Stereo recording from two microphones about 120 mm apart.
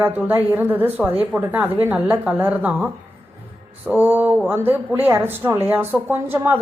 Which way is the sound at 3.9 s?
15° right (ahead or behind).